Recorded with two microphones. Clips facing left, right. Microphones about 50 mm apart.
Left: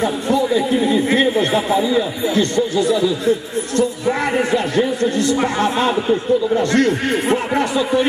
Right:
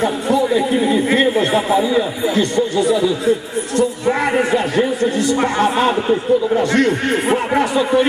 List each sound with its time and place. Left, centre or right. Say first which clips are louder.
0.0 s speech: right 1 dB; centre